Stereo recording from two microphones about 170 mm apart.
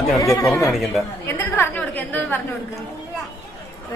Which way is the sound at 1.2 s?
15° left (ahead or behind).